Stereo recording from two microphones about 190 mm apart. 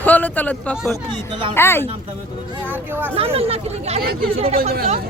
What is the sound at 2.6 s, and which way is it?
Speech, 10° right (ahead or behind).